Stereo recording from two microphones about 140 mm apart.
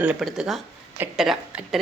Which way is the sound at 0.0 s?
10° right (ahead or behind).